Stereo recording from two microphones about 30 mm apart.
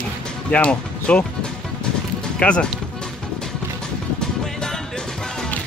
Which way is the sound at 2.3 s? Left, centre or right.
Left.